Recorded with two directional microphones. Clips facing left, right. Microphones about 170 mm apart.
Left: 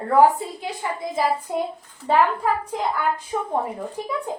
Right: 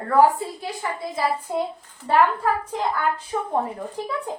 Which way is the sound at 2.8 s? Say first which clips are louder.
Even; 10° left (ahead or behind).